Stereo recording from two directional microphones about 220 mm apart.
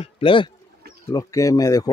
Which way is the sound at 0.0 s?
25° left (ahead or behind).